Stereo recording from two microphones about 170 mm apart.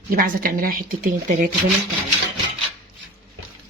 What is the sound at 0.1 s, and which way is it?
A woman's voice, 60° right (ahead or behind).